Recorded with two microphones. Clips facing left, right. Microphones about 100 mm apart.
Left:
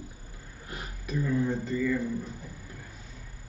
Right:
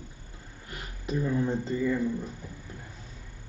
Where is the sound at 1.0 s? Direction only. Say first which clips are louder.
Even; 25° right (ahead or behind).